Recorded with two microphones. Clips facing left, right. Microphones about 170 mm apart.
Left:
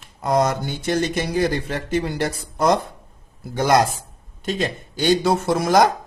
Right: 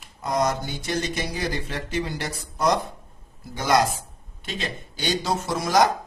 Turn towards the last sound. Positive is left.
turn(degrees=55)  # may be behind; listen again after turning